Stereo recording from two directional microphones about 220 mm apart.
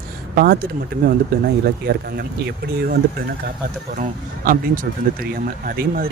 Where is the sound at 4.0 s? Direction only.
40° right (ahead or behind).